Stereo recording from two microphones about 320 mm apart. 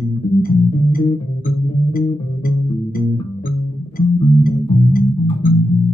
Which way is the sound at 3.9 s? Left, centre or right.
Left.